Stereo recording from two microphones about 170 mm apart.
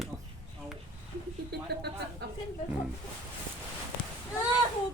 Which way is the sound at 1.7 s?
75° right (ahead or behind).